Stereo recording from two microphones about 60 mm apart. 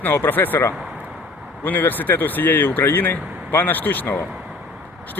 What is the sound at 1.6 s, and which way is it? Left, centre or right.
Speech, left.